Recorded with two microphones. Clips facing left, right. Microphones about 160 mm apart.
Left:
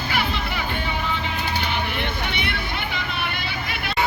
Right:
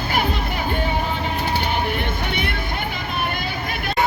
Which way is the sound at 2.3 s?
45° right (ahead or behind).